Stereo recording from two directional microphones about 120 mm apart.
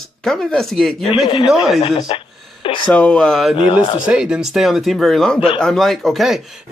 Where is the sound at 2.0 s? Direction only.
40° left (ahead or behind).